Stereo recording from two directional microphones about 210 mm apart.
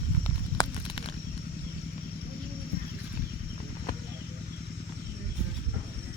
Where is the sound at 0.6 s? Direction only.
20° left (ahead or behind).